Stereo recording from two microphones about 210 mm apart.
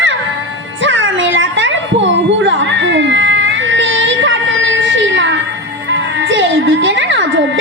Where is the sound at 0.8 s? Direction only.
60° right (ahead or behind).